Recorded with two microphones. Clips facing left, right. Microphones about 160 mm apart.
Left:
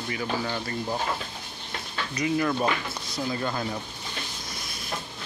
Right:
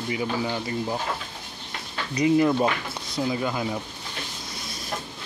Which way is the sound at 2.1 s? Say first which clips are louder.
Right 6 dB; 25° right (ahead or behind).